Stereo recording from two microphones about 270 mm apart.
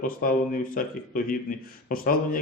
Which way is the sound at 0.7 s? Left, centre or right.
Left.